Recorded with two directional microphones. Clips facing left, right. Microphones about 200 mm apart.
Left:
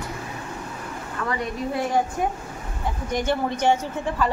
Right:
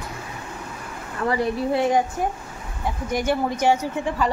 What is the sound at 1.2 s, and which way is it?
Speech, 30° right (ahead or behind).